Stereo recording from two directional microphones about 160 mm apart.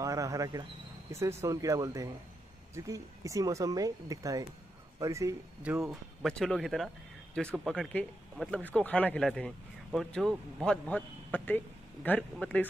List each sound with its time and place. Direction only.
0.0 s speech: 20° right (ahead or behind)
5.9 s a man's voice: centre (ahead or behind)